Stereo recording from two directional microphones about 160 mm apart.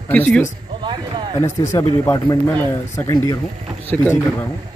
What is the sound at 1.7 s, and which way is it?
A man's voice, 20° left (ahead or behind).